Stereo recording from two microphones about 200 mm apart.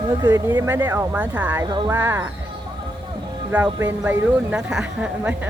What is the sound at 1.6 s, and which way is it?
Speech, 20° right (ahead or behind).